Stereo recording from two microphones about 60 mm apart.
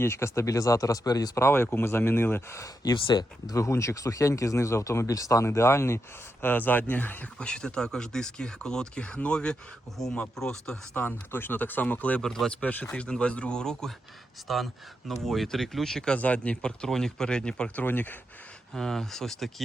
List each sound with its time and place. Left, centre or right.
0.0 s speech: left
1.4 s speech: left
2.6 s speech: left
3.5 s speech: left
5.5 s speech: left
6.4 s speech: left
7.3 s speech: centre
10.9 s speech: left
12.2 s speech: centre
12.5 s speech: left
14.4 s speech: centre
16.1 s speech: left
17.7 s speech: left
18.7 s speech: centre